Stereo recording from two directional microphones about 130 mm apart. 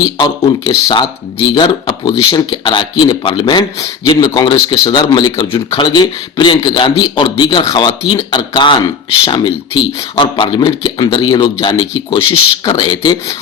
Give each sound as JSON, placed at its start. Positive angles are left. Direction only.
{"t": 0.0, "sound": "speech", "side_deg": 30}